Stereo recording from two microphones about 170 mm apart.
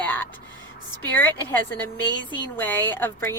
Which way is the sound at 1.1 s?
10° left (ahead or behind).